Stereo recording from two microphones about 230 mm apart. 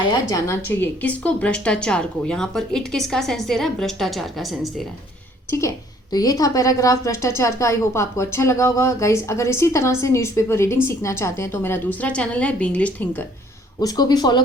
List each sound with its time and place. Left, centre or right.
0.0 s a woman's voice: centre
5.5 s a woman's voice: centre